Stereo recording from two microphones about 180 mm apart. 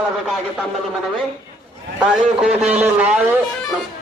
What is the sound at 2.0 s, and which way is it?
Speech, centre (ahead or behind).